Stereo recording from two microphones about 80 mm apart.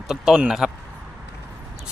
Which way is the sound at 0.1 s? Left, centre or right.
Centre.